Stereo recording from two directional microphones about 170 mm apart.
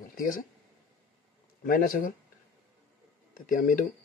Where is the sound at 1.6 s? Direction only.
55° left (ahead or behind).